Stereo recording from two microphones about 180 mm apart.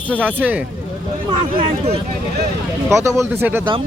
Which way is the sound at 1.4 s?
30° right (ahead or behind).